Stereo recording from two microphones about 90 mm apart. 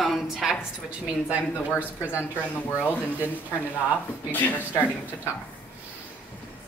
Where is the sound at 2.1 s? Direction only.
25° left (ahead or behind).